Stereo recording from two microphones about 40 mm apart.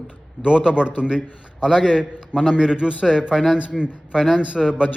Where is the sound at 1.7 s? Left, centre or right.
Centre.